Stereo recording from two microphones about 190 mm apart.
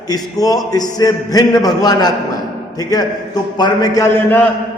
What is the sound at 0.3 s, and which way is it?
A man's voice, 20° left (ahead or behind).